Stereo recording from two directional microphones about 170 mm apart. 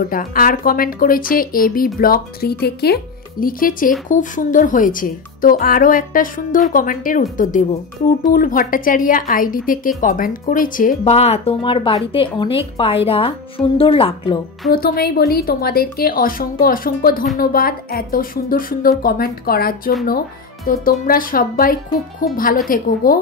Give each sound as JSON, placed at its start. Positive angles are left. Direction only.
{"t": 0.1, "sound": "a woman's voice", "side_deg": 55}
{"t": 8.3, "sound": "a woman's voice", "side_deg": 55}
{"t": 11.1, "sound": "a woman's voice", "side_deg": 35}
{"t": 14.7, "sound": "a woman's voice", "side_deg": 65}